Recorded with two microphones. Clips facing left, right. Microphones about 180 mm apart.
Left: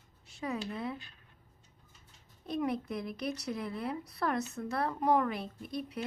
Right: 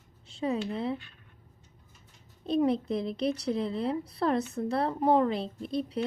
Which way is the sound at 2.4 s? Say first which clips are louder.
Right 7 dB; 30° right (ahead or behind).